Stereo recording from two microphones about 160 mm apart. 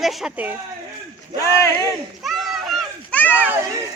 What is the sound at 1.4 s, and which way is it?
Speech, 20° left (ahead or behind).